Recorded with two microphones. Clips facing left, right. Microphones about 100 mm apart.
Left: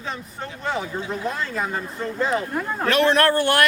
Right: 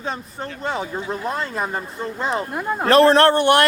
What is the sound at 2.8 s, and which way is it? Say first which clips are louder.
Speech: right 5 dB; 35° right (ahead or behind).